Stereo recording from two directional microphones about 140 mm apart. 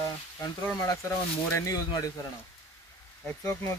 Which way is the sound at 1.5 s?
25° left (ahead or behind).